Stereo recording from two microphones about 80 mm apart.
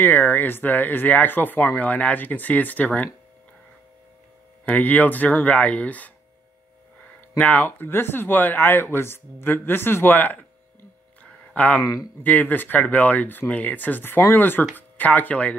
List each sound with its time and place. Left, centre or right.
0.0 s speech: left
4.6 s speech: left
7.3 s speech: centre
11.2 s a sound: centre
12.2 s speech: left